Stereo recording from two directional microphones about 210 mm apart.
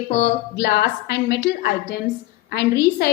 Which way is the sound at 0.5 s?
50° left (ahead or behind).